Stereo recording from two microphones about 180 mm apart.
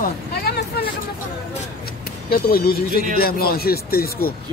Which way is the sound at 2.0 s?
55° left (ahead or behind).